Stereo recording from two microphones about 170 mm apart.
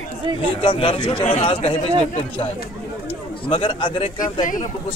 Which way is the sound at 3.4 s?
30° left (ahead or behind).